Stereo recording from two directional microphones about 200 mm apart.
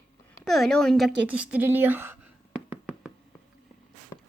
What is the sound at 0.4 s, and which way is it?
A woman's voice, centre (ahead or behind).